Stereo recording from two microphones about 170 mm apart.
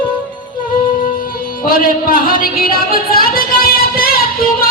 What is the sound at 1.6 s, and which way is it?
Music, 55° left (ahead or behind).